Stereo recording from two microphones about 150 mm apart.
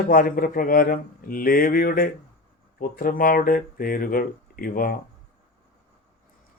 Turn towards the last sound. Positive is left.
turn(degrees=70)  # may be behind; listen again after turning